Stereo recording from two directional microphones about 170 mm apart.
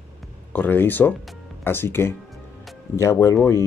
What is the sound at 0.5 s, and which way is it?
Speech, 10° left (ahead or behind).